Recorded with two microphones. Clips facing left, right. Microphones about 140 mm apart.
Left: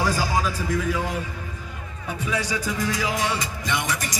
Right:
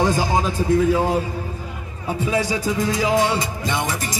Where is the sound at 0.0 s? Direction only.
25° right (ahead or behind).